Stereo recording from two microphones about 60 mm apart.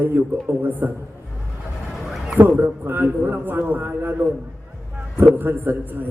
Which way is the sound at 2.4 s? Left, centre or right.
Right.